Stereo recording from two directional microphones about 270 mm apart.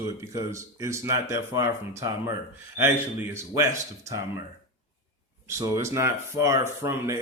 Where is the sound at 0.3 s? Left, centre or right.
Centre.